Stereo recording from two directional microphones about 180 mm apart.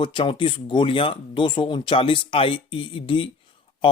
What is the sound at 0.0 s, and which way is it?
Speech, 25° left (ahead or behind).